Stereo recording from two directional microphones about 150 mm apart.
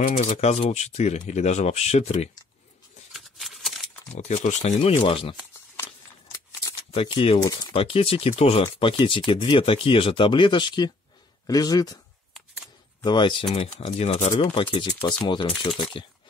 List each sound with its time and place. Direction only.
0.0 s speech: 55° left (ahead or behind)
3.1 s shuffling cards: centre (ahead or behind)
4.1 s speech: 50° left (ahead or behind)
6.9 s speech: 40° left (ahead or behind)
7.4 s speech: 25° left (ahead or behind)
13.0 s speech: 30° left (ahead or behind)
13.7 s speech: 45° left (ahead or behind)
14.3 s speech: 30° left (ahead or behind)